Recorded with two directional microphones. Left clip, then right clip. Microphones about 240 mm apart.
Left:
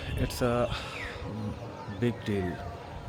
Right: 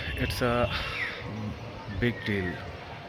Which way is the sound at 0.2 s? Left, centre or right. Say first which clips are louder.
Right 1 dB; centre.